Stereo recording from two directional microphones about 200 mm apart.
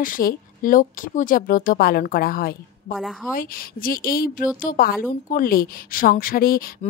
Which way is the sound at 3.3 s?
45° left (ahead or behind).